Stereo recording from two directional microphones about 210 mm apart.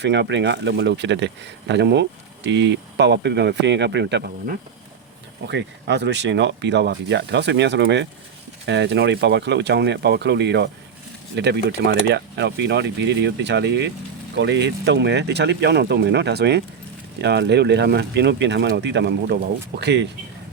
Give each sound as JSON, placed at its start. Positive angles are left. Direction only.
{"t": 0.0, "sound": "speech", "side_deg": -55}